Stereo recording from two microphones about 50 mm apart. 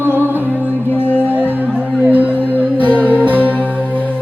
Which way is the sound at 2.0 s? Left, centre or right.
Right.